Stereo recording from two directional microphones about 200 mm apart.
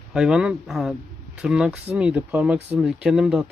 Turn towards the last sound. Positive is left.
turn(degrees=-5)  # may be behind; listen again after turning